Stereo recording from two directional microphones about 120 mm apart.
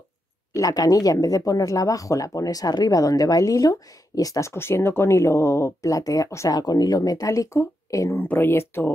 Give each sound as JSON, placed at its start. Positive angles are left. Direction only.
{"t": 0.5, "sound": "speech", "side_deg": 30}